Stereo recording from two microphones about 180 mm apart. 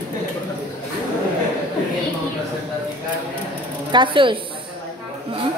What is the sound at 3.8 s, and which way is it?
Speech, 25° right (ahead or behind).